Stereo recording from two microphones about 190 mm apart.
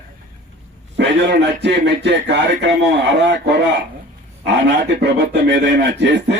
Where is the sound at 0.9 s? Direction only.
65° right (ahead or behind).